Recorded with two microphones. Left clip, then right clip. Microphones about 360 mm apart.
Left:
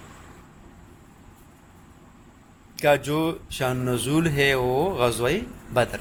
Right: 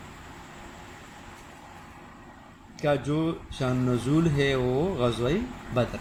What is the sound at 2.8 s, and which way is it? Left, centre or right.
Speech, left.